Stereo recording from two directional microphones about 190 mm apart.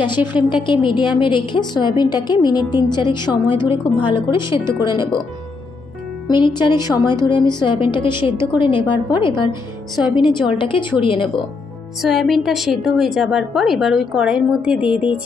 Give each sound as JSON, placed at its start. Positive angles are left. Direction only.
{"t": 0.2, "sound": "a woman's voice", "side_deg": -10}
{"t": 0.5, "sound": "a woman's voice", "side_deg": 25}
{"t": 6.2, "sound": "a woman's voice", "side_deg": 25}
{"t": 12.0, "sound": "a woman's voice", "side_deg": 0}